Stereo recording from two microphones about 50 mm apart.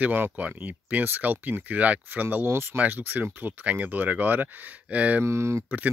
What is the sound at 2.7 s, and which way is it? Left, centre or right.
Speech, right.